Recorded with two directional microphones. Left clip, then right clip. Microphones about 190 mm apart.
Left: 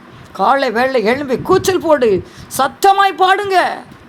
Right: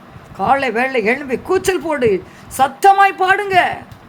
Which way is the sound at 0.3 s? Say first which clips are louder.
Left 2 dB; 15° left (ahead or behind).